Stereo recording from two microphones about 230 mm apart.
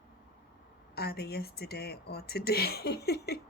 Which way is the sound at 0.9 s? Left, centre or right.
Left.